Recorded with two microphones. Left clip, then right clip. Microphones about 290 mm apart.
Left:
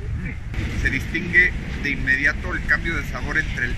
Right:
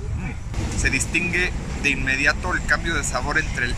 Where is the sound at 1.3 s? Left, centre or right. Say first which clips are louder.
Left 6 dB; right.